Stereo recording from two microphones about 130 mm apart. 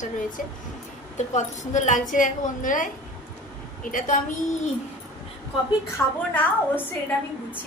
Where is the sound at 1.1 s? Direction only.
65° left (ahead or behind); by 4.2 s 90° left.